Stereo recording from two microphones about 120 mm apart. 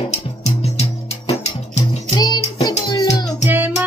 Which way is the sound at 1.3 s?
60° left (ahead or behind).